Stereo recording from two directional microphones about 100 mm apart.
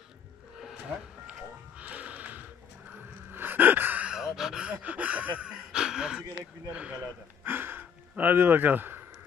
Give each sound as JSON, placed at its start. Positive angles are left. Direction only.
{"t": 0.6, "sound": "music", "side_deg": -5}
{"t": 3.3, "sound": "gasp", "side_deg": -20}
{"t": 6.7, "sound": "speech", "side_deg": -15}